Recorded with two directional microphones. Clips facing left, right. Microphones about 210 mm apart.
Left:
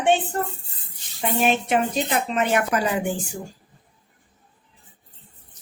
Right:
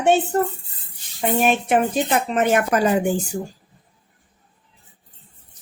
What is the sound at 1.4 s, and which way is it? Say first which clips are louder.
A woman's voice: right 2 dB; 50° right (ahead or behind).